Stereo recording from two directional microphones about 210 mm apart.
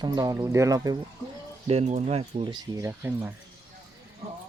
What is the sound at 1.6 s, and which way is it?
Speech, 30° right (ahead or behind).